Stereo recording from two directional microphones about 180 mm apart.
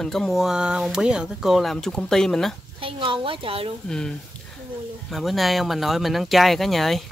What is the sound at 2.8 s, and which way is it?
Speech, 30° right (ahead or behind).